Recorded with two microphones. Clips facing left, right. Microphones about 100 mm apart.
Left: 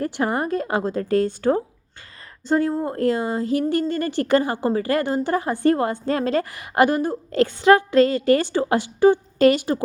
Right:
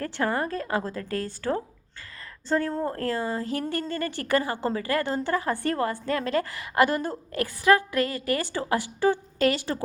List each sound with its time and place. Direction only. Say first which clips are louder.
0.0 s a woman's voice: left 4 dB; 20° left (ahead or behind)